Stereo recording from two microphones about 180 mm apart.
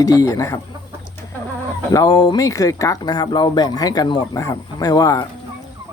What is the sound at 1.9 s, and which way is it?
Speech, 20° left (ahead or behind).